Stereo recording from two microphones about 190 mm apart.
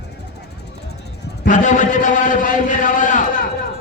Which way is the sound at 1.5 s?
40° left (ahead or behind).